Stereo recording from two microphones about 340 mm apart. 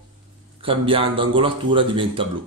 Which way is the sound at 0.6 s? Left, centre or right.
Centre.